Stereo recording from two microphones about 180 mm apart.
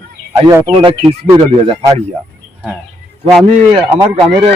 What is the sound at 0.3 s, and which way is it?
Speech, 20° right (ahead or behind).